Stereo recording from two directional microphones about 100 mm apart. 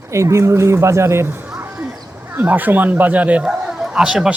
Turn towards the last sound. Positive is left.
turn(degrees=-5)  # may be behind; listen again after turning